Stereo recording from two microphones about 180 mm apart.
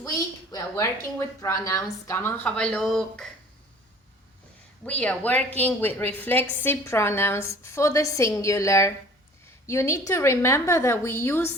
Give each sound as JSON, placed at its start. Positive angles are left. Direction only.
{"t": 0.0, "sound": "a woman's voice", "side_deg": 20}
{"t": 4.9, "sound": "a woman's voice", "side_deg": 5}